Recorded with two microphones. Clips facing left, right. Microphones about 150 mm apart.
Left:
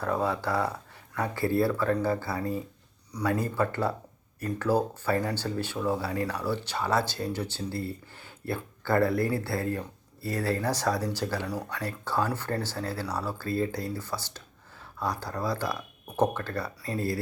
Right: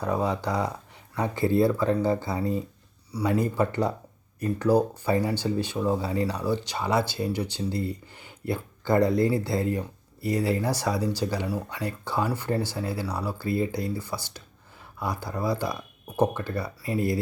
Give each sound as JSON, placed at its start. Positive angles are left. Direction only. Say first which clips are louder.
{"t": 0.0, "sound": "speech", "louder": "right 2 dB", "side_deg": -15}